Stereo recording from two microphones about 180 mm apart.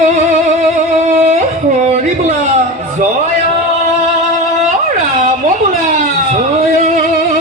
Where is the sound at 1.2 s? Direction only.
40° right (ahead or behind).